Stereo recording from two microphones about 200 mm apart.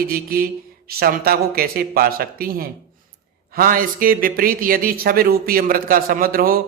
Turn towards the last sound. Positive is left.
turn(degrees=-45)  # may be behind; listen again after turning